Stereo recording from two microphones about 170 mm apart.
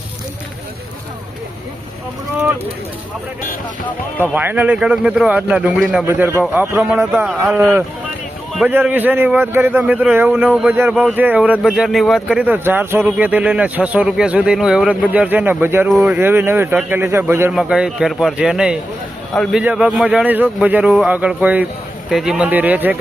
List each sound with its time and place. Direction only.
4.2 s a man's voice: 10° right (ahead or behind)